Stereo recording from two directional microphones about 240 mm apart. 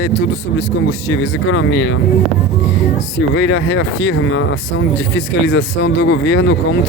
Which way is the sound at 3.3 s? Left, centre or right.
Left.